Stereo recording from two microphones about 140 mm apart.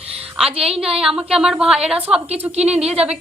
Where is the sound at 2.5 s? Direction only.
50° right (ahead or behind).